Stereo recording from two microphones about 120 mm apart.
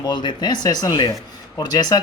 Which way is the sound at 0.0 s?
40° left (ahead or behind).